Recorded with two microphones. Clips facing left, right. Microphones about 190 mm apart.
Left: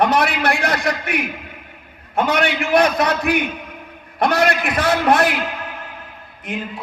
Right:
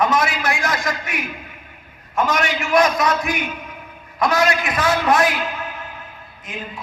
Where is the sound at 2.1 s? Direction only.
60° left (ahead or behind).